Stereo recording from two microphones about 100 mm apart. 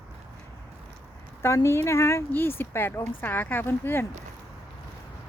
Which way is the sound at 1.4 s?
30° left (ahead or behind).